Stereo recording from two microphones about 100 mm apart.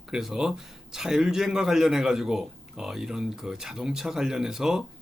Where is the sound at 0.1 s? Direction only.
5° right (ahead or behind).